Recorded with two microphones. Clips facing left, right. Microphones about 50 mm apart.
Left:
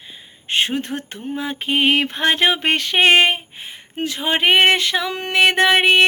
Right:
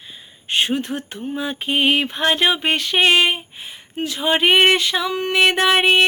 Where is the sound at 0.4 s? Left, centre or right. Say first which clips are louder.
Even; left.